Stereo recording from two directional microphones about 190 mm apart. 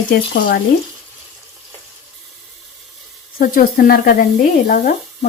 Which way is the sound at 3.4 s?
50° left (ahead or behind).